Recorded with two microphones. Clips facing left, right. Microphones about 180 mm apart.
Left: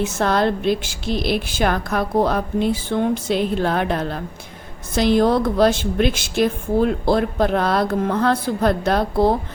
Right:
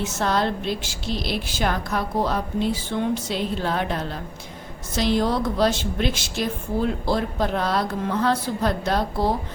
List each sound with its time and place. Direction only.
0.0 s a woman's voice: 55° left (ahead or behind)